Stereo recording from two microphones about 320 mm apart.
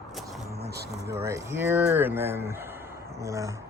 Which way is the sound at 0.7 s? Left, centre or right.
Right.